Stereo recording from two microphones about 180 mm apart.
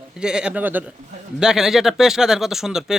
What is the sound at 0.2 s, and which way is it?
Speech, 5° right (ahead or behind).